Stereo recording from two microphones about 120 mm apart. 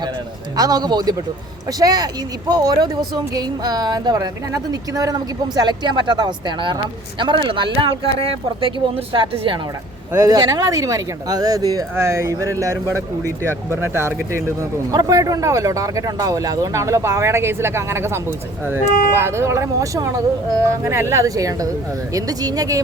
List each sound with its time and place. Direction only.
0.5 s a woman's voice: 35° right (ahead or behind)
10.1 s a man's voice: 30° right (ahead or behind)